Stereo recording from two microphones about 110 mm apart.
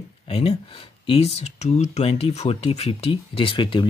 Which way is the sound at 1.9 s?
70° left (ahead or behind).